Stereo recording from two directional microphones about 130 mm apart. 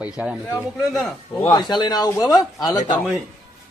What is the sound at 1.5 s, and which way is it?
Speech, 35° left (ahead or behind).